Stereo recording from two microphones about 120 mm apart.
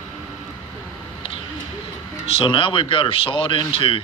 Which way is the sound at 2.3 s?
50° left (ahead or behind).